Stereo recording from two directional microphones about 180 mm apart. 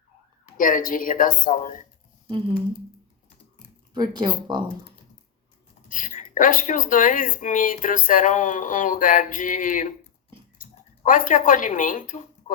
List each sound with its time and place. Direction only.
0.5 s speech: 50° left (ahead or behind)
3.9 s speech: 25° right (ahead or behind)
5.9 s speech: 45° left (ahead or behind)